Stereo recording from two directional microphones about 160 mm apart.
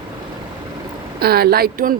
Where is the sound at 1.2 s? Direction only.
75° right (ahead or behind).